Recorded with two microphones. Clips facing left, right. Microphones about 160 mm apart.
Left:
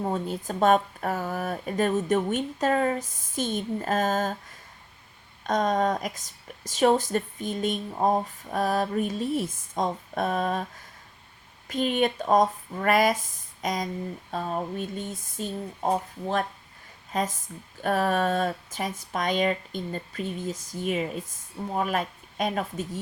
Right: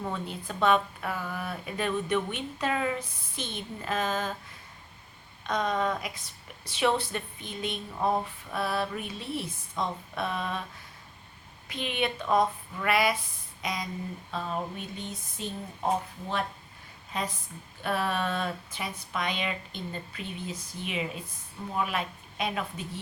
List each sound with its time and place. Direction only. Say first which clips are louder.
0.0 s a woman's voice: left 6 dB; 40° left (ahead or behind)
5.4 s a woman's voice: left 5 dB; 45° left (ahead or behind)
11.7 s a woman's voice: left 7 dB; 45° left (ahead or behind)
17.1 s a woman's voice: left 5 dB; 45° left (ahead or behind)